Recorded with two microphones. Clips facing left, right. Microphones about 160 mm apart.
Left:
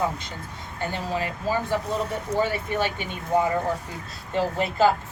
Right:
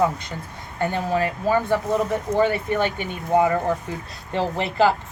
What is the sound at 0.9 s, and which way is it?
A woman's voice, 55° right (ahead or behind).